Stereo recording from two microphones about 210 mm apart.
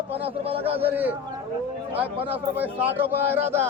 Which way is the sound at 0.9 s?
10° right (ahead or behind).